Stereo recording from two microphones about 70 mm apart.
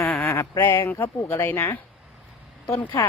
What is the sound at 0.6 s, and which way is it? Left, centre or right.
Speech, left.